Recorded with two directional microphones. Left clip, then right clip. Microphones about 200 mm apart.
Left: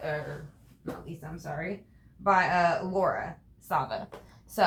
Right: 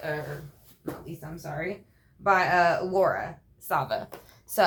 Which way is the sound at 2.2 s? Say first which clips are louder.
Right 2 dB; 55° right (ahead or behind).